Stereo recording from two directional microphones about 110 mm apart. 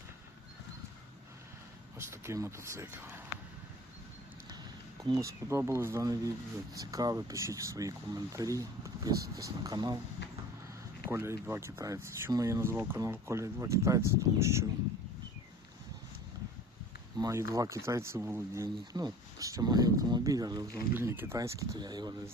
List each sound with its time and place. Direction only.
2.0 s speech: 25° right (ahead or behind)
5.0 s speech: 30° right (ahead or behind)
11.1 s speech: 25° right (ahead or behind)
12.7 s speech: 15° right (ahead or behind)
17.2 s speech: 30° right (ahead or behind)
20.9 s speech: 20° right (ahead or behind); by 22.1 s 40° right (ahead or behind)